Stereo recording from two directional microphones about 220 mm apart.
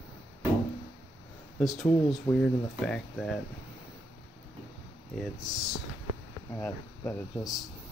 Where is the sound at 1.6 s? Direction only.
5° left (ahead or behind).